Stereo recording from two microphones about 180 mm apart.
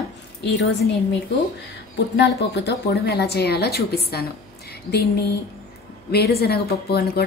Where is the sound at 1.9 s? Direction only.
70° left (ahead or behind).